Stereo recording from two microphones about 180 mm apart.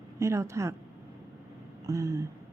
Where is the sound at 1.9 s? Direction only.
15° right (ahead or behind).